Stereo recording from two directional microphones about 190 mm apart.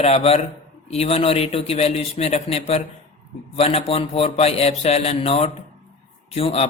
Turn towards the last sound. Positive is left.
turn(degrees=35)  # may be behind; listen again after turning